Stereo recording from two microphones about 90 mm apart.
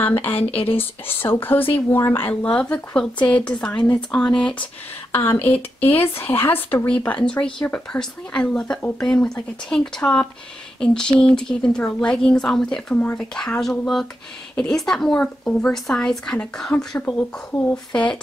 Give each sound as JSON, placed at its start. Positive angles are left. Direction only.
{"t": 0.0, "sound": "speech", "side_deg": 25}
{"t": 2.4, "sound": "a woman's voice", "side_deg": 10}
{"t": 5.1, "sound": "speech", "side_deg": 25}
{"t": 7.1, "sound": "a woman's voice", "side_deg": 15}
{"t": 17.0, "sound": "a woman's voice", "side_deg": 20}